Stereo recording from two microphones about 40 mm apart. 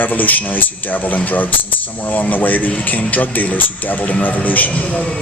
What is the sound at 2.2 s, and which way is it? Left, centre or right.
A man's voice, left.